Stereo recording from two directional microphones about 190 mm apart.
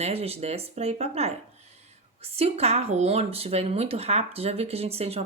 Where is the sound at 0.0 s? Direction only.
35° right (ahead or behind).